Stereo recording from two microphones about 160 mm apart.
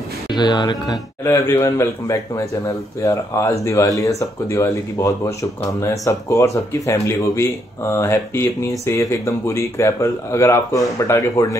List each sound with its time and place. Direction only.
0.3 s speech: 30° left (ahead or behind)
1.2 s speech: 15° left (ahead or behind)